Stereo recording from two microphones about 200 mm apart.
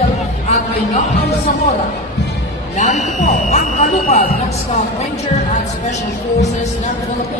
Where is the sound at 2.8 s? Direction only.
35° left (ahead or behind).